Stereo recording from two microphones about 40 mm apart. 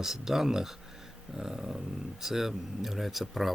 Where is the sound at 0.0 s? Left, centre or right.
Centre.